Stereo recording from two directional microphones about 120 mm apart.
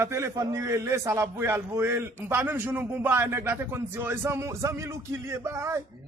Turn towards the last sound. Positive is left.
turn(degrees=-25)  # may be behind; listen again after turning